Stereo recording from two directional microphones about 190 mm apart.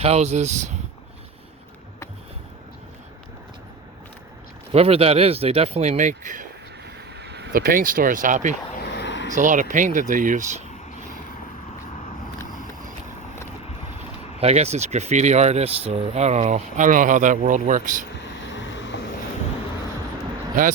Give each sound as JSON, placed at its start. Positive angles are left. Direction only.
{"t": 0.0, "sound": "speech", "side_deg": -35}
{"t": 4.7, "sound": "speech", "side_deg": -30}
{"t": 7.1, "sound": "speech", "side_deg": -60}
{"t": 8.8, "sound": "a sound", "side_deg": 65}
{"t": 9.3, "sound": "speech", "side_deg": -40}
{"t": 14.4, "sound": "speech", "side_deg": -35}
{"t": 18.5, "sound": "vehicle", "side_deg": 70}